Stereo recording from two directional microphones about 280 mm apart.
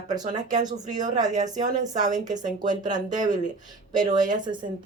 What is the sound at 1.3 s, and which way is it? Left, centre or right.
Speech, right.